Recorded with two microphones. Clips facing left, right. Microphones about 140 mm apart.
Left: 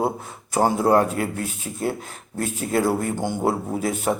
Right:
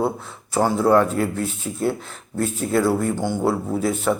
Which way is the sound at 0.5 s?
45° left (ahead or behind).